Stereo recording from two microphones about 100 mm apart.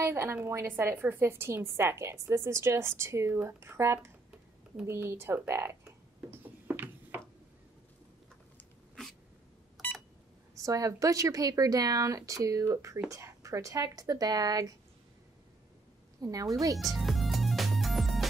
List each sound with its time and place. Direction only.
0.0 s a woman's voice: 25° right (ahead or behind)
5.5 s a sound: 25° right (ahead or behind)
10.6 s speech: 35° right (ahead or behind)
16.2 s speech: 35° right (ahead or behind)
16.7 s music: centre (ahead or behind)